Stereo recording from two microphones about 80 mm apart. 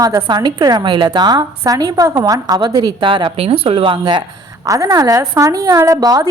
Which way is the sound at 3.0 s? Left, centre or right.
Right.